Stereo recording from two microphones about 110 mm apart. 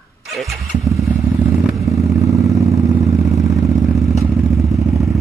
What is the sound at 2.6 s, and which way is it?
Vehicle, 30° right (ahead or behind).